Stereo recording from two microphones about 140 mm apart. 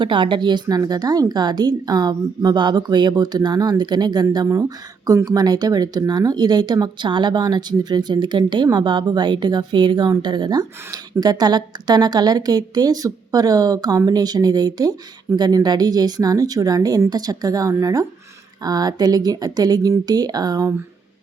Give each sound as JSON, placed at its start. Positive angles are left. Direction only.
{"t": 0.0, "sound": "a woman's voice", "side_deg": -35}